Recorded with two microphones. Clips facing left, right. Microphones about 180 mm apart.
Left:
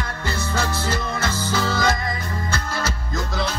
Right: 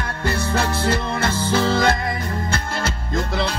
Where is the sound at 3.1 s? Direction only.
60° right (ahead or behind).